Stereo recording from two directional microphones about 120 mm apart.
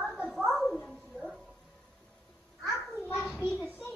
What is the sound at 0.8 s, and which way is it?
Dog, 5° left (ahead or behind).